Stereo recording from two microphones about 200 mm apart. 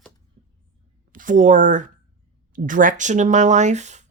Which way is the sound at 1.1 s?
40° right (ahead or behind).